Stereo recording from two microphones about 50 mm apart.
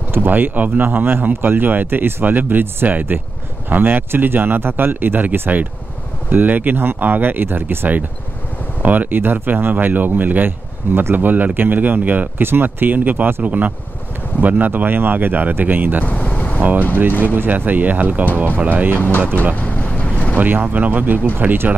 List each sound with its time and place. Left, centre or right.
0.1 s speech: right
12.4 s speech: right
16.1 s vehicle: left
16.5 s speech: right
18.9 s speech: left
19.5 s vehicle: left
19.9 s boat: left
20.3 s speech: right